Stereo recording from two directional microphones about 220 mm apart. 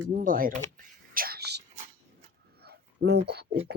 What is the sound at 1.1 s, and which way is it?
Whispering, 40° right (ahead or behind).